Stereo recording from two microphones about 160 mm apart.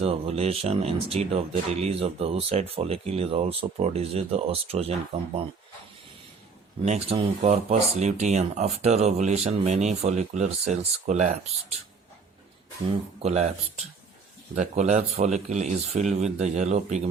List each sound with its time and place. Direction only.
0.0 s speech: 40° right (ahead or behind)
6.8 s speech: 40° right (ahead or behind)
13.1 s speech: 45° right (ahead or behind)